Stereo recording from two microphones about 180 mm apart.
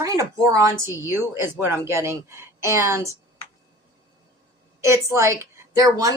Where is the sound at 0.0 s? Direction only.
20° right (ahead or behind).